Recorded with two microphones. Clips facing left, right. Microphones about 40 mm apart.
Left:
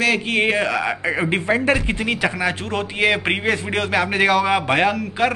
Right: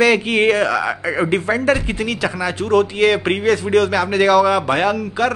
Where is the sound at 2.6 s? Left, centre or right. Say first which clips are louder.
Right 10 dB; centre.